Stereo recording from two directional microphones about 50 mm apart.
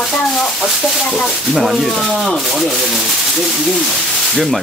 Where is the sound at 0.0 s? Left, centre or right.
Centre.